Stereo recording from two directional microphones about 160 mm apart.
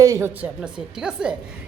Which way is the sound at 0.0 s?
20° right (ahead or behind).